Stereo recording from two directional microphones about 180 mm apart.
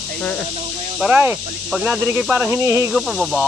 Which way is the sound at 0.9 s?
10° right (ahead or behind).